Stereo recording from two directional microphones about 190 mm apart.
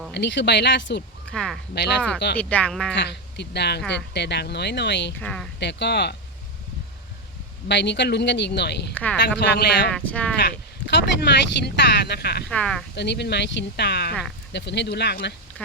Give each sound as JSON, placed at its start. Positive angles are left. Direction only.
{"t": 0.1, "sound": "speech", "side_deg": 65}
{"t": 1.3, "sound": "speech", "side_deg": 0}
{"t": 2.1, "sound": "speech", "side_deg": 60}
{"t": 2.4, "sound": "speech", "side_deg": 5}
{"t": 2.9, "sound": "speech", "side_deg": 65}
{"t": 5.2, "sound": "speech", "side_deg": 5}
{"t": 5.5, "sound": "speech", "side_deg": 65}
{"t": 7.7, "sound": "speech", "side_deg": 65}
{"t": 9.9, "sound": "speech", "side_deg": 5}
{"t": 10.4, "sound": "speech", "side_deg": 60}
{"t": 12.5, "sound": "speech", "side_deg": 5}
{"t": 13.0, "sound": "speech", "side_deg": 60}